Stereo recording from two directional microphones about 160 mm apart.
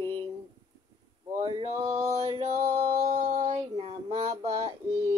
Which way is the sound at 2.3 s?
45° right (ahead or behind).